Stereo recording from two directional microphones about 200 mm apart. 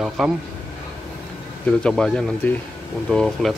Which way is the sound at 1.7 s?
5° left (ahead or behind).